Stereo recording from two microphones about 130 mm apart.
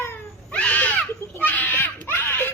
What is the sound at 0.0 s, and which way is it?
Baby cry, 15° left (ahead or behind).